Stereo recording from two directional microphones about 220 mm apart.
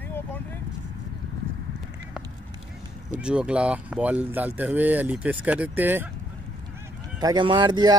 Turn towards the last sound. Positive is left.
turn(degrees=-20)  # may be behind; listen again after turning